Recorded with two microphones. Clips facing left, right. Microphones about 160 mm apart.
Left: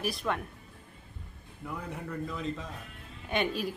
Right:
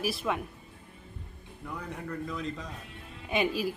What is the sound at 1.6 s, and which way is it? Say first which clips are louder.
Speech: even; 5° left (ahead or behind).